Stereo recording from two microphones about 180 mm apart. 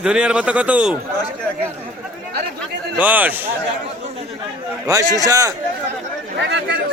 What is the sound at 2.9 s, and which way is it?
Speech, 10° right (ahead or behind).